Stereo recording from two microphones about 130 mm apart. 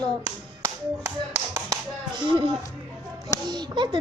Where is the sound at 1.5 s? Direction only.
30° right (ahead or behind).